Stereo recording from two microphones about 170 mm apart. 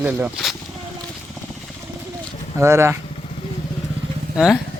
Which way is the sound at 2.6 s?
15° right (ahead or behind).